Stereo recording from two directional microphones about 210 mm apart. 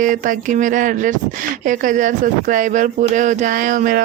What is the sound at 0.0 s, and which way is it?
Speech, 40° right (ahead or behind).